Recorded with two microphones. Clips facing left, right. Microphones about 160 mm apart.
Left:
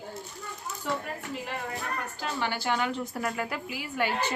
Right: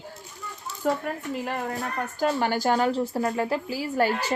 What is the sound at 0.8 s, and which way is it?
Speech, 45° right (ahead or behind).